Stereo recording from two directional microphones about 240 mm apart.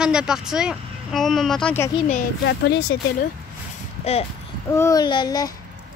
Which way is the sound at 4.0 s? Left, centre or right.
Left.